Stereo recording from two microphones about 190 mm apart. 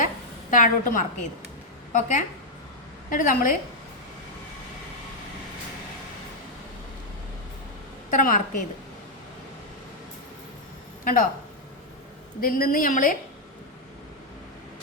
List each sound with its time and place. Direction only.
0.5 s a woman's voice: 45° left (ahead or behind)
8.1 s a woman's voice: 45° left (ahead or behind)
11.0 s speech: 45° left (ahead or behind)
12.4 s a woman's voice: 50° left (ahead or behind)